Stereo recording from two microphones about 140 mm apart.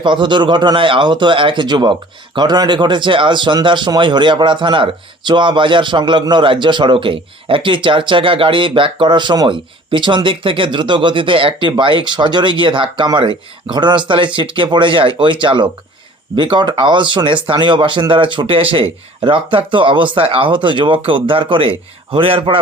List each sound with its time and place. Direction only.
0.0 s speech: 35° right (ahead or behind)